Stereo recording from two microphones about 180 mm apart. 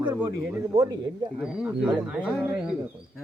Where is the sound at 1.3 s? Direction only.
5° right (ahead or behind).